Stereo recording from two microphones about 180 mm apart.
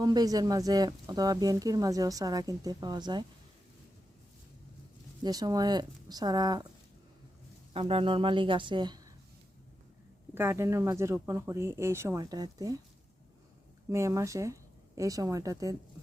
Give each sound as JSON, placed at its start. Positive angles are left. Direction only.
{"t": 0.0, "sound": "speech", "side_deg": -20}
{"t": 5.2, "sound": "speech", "side_deg": -20}
{"t": 7.7, "sound": "speech", "side_deg": -30}
{"t": 10.3, "sound": "speech", "side_deg": -15}
{"t": 13.9, "sound": "a woman's voice", "side_deg": -15}